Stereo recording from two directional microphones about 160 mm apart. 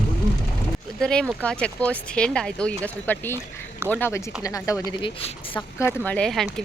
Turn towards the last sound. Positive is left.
turn(degrees=5)  # may be behind; listen again after turning